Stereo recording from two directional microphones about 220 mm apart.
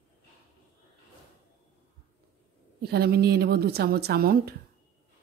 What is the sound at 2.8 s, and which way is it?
A woman's voice, 45° right (ahead or behind).